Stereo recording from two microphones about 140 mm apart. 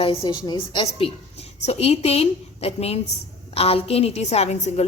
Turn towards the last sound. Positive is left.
turn(degrees=50)  # may be behind; listen again after turning